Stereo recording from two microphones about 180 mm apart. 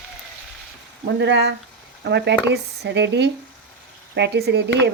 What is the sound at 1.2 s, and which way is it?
Speech, 70° right (ahead or behind).